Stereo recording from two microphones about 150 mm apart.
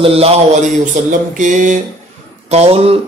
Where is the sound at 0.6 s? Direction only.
55° right (ahead or behind).